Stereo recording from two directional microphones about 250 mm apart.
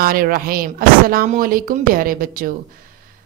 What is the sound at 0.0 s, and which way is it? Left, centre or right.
A woman's voice, right.